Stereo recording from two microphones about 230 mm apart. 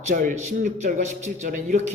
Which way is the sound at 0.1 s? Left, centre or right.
Right.